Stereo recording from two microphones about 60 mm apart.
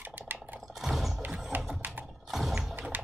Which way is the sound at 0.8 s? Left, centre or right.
Centre.